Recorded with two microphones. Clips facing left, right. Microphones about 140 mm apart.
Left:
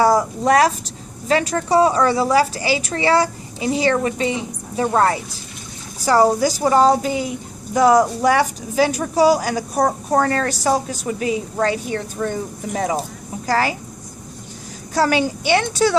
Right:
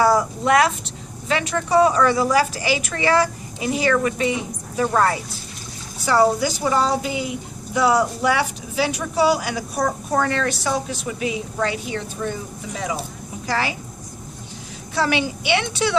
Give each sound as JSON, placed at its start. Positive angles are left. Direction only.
{"t": 0.0, "sound": "a woman's voice", "side_deg": 35}
{"t": 6.1, "sound": "a woman's voice", "side_deg": 40}
{"t": 14.9, "sound": "a woman's voice", "side_deg": 40}